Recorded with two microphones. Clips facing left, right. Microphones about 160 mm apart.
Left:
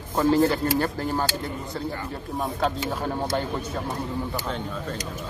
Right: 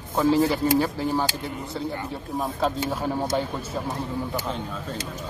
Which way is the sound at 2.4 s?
Centre (ahead or behind).